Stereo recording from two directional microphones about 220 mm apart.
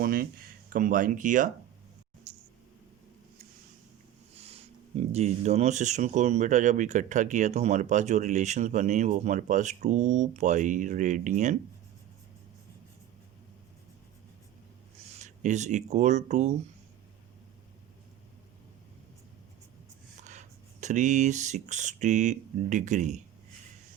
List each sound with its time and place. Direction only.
0.0 s speech: 40° right (ahead or behind)
4.4 s speech: 30° right (ahead or behind)
15.2 s speech: 30° right (ahead or behind)
20.8 s speech: 35° right (ahead or behind)